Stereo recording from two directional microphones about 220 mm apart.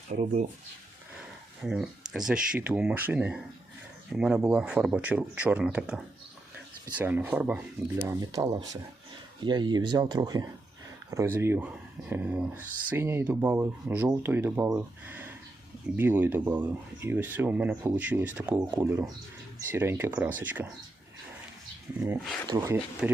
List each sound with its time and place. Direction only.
0.1 s speech: 35° right (ahead or behind)
1.6 s speech: 5° right (ahead or behind)
21.9 s speech: 10° right (ahead or behind)